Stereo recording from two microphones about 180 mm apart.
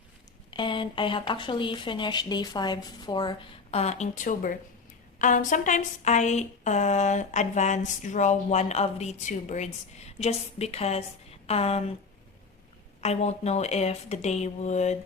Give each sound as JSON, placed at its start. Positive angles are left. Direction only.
{"t": 0.5, "sound": "speech", "side_deg": 25}
{"t": 13.0, "sound": "speech", "side_deg": 35}